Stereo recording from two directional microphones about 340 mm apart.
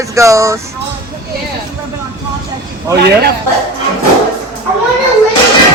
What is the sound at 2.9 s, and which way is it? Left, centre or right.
Speech, right.